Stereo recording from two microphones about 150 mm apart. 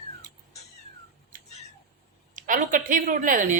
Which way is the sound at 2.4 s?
60° right (ahead or behind).